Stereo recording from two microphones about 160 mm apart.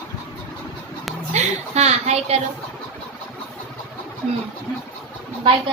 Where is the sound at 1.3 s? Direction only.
45° right (ahead or behind).